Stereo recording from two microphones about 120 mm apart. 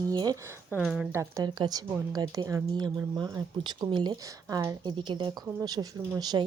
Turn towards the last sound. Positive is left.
turn(degrees=-35)  # may be behind; listen again after turning